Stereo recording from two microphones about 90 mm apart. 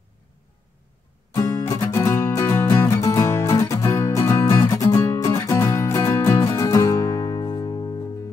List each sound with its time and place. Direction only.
1.3 s music: 35° left (ahead or behind)